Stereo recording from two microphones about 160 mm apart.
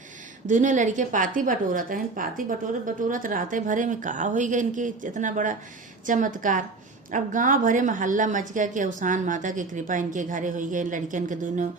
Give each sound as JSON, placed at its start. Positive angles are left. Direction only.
{"t": 0.4, "sound": "a woman's voice", "side_deg": -50}